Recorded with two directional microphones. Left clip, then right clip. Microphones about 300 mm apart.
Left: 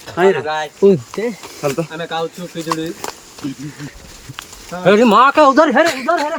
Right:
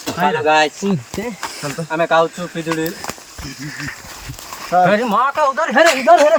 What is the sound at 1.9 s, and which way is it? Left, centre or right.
Speech, centre.